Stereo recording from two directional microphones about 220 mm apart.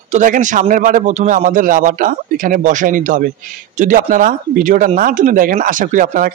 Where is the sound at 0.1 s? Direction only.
35° right (ahead or behind).